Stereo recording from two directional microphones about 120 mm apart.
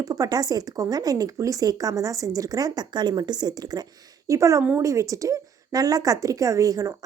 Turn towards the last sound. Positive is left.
turn(degrees=-30)  # may be behind; listen again after turning